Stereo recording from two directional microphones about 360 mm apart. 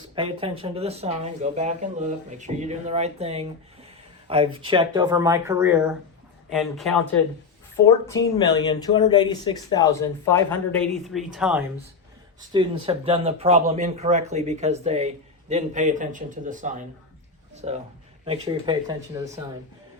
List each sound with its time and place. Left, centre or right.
0.2 s speech: centre
8.4 s speech: centre
12.5 s speech: centre
17.5 s a sound: centre
18.3 s speech: centre